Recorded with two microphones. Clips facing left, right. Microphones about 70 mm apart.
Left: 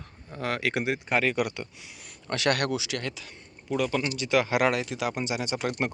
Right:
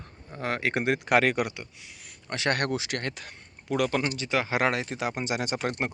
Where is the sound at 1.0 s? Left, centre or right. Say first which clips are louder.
Right 5 dB; right.